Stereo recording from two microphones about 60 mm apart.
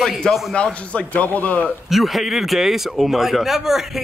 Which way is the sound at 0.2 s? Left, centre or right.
Centre.